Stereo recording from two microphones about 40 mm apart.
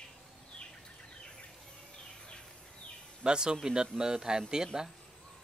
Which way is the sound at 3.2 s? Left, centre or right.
Right.